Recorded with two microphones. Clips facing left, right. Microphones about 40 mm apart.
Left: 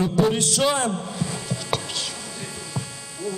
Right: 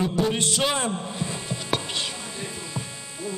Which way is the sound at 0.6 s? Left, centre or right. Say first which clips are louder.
Left 5 dB; right.